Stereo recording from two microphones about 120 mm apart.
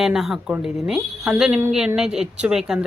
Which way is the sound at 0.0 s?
Centre (ahead or behind).